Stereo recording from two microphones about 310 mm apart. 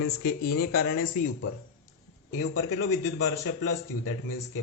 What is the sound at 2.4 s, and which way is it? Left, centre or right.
Speech, left.